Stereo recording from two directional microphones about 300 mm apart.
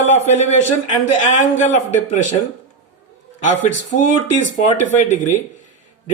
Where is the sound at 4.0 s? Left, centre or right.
Left.